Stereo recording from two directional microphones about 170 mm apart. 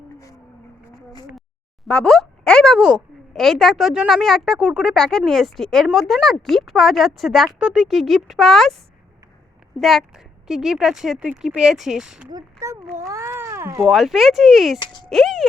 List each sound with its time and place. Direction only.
1.8 s speech: 5° left (ahead or behind)
9.7 s speech: centre (ahead or behind)
12.3 s a child's voice: 20° right (ahead or behind)
13.8 s speech: centre (ahead or behind)